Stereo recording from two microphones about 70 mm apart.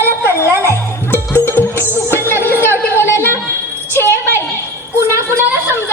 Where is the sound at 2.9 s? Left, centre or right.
Left.